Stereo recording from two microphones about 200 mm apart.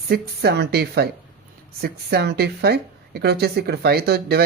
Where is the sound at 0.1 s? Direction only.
55° right (ahead or behind).